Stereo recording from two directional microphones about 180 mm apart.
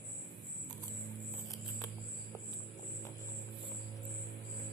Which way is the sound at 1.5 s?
20° left (ahead or behind).